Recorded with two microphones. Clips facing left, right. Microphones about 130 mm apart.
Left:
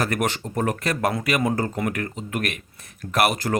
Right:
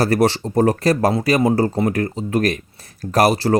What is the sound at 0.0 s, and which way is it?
Speech, 35° right (ahead or behind).